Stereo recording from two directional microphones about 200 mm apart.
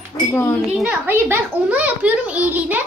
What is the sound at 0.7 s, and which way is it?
A child's voice, 5° right (ahead or behind).